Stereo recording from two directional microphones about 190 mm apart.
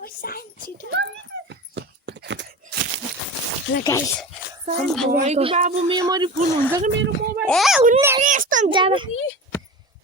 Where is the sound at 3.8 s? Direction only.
15° left (ahead or behind).